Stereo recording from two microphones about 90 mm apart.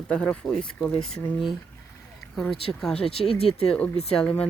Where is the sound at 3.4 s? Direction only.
90° left.